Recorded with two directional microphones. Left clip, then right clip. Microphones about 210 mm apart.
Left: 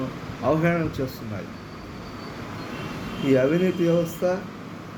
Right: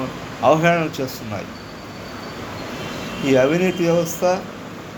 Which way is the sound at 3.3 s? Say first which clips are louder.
Right 4 dB; 15° left (ahead or behind).